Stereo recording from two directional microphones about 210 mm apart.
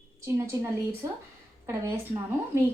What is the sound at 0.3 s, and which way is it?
Speech, 15° right (ahead or behind).